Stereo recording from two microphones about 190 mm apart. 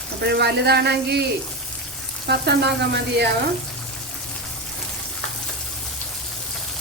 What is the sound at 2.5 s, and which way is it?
Speech, 60° right (ahead or behind).